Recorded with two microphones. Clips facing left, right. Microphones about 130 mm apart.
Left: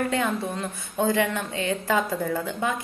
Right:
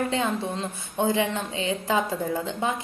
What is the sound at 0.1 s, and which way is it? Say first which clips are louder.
A woman's voice: even; 20° right (ahead or behind).